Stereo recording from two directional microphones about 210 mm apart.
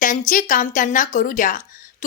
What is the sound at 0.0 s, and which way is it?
Speech, 40° left (ahead or behind).